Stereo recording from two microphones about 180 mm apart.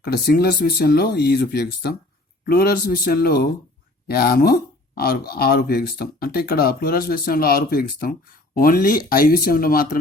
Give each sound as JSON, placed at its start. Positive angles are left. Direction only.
{"t": 0.0, "sound": "speech", "side_deg": 60}